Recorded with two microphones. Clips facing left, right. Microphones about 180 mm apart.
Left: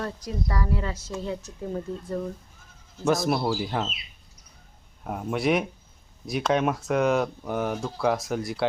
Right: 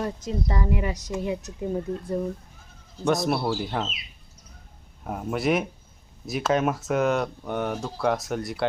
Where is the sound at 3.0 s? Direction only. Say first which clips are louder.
Even; centre (ahead or behind).